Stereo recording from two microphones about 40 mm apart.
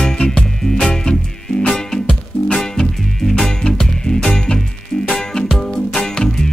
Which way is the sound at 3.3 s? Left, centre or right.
Centre.